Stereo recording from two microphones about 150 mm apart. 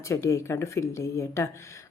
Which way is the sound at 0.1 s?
20° left (ahead or behind).